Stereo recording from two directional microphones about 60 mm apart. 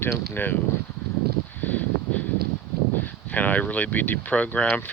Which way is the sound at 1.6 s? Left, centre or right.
Left.